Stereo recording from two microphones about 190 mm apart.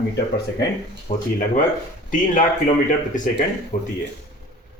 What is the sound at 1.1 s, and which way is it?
Speech, 30° left (ahead or behind).